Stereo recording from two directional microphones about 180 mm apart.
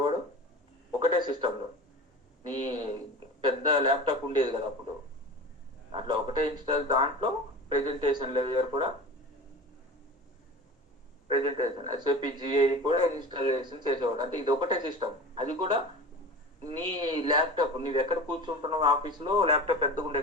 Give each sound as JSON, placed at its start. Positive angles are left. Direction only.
{"t": 0.9, "sound": "a sound", "side_deg": -25}
{"t": 6.1, "sound": "a man's voice", "side_deg": -25}
{"t": 11.3, "sound": "a man's voice", "side_deg": -25}